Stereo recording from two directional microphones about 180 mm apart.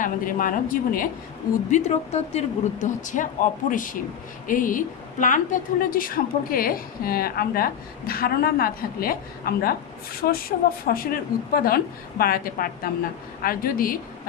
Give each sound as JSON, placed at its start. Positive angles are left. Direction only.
{"t": 0.0, "sound": "a woman's voice", "side_deg": 50}
{"t": 1.7, "sound": "a woman's voice", "side_deg": 40}